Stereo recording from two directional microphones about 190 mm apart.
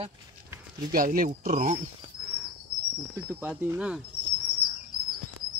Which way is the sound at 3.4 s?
5° right (ahead or behind).